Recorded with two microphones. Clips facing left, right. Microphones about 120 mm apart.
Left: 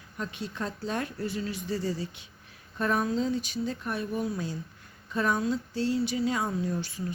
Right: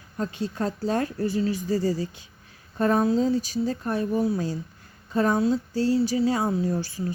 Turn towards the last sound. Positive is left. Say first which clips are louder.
# right 5 dB
turn(degrees=-30)  # may be behind; listen again after turning